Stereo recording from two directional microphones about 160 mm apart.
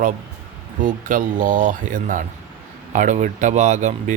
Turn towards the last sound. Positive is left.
turn(degrees=-50)  # may be behind; listen again after turning